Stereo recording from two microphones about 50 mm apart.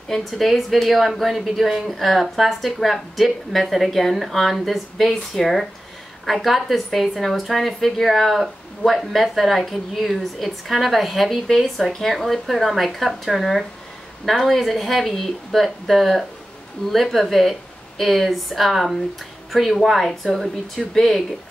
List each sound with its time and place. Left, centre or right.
0.1 s speech: centre